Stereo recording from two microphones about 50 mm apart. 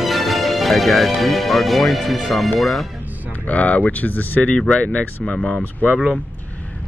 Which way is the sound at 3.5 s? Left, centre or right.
Left.